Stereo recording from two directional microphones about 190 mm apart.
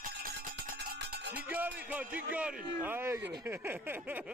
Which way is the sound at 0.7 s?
60° right (ahead or behind).